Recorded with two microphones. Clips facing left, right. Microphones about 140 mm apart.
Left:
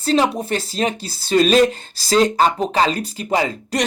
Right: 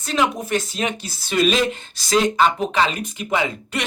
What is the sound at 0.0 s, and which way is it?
Speech, 30° left (ahead or behind).